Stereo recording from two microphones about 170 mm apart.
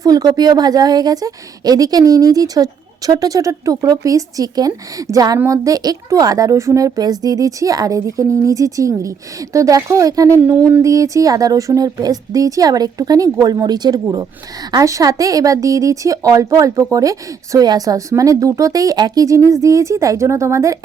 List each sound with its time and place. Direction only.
0.0 s speech: 20° right (ahead or behind)